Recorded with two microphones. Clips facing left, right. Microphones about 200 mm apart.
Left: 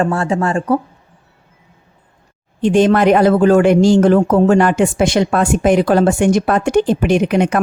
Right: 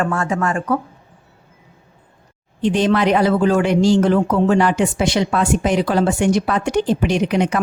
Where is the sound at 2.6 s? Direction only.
50° left (ahead or behind).